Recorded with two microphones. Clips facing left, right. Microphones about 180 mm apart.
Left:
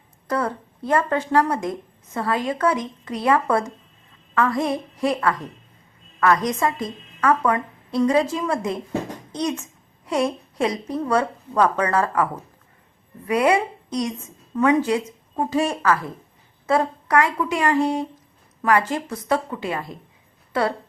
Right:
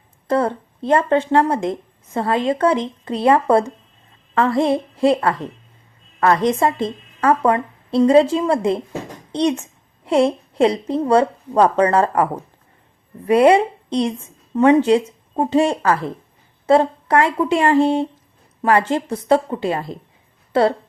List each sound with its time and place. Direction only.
0.3 s a woman's voice: 25° right (ahead or behind)